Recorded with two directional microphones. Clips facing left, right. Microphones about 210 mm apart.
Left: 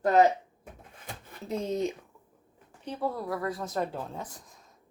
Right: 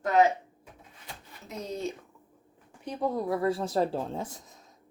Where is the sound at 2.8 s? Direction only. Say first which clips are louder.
Right 3 dB; 15° right (ahead or behind).